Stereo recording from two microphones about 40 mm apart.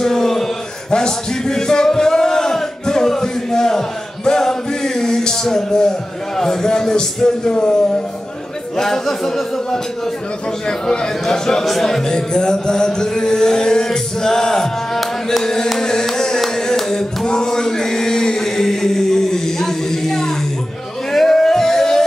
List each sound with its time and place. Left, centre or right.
0.0 s a sound: centre
7.2 s music: centre
7.5 s speech: left
8.7 s music: centre
10.9 s music: centre
11.6 s speech: centre
12.1 s music: centre
16.9 s male singing: centre
21.1 s music: centre